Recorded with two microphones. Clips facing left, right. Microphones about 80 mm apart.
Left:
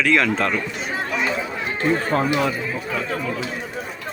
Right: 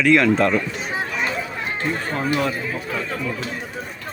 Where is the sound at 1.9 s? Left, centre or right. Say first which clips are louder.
Left 9 dB; left.